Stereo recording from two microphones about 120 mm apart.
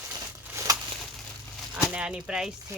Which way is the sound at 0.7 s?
30° right (ahead or behind).